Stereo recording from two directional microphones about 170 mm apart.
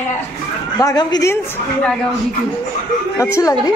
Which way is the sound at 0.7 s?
20° left (ahead or behind).